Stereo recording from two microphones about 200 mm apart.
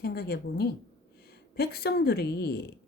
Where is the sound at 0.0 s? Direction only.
55° left (ahead or behind).